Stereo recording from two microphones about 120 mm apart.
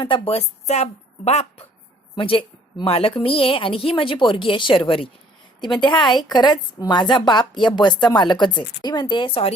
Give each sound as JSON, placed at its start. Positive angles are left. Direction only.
{"t": 0.0, "sound": "a woman's voice", "side_deg": 50}
{"t": 2.1, "sound": "a woman's voice", "side_deg": 45}
{"t": 5.5, "sound": "a woman's voice", "side_deg": 35}